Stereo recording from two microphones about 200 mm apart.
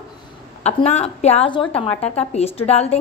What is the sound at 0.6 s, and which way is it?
A woman's voice, 35° left (ahead or behind).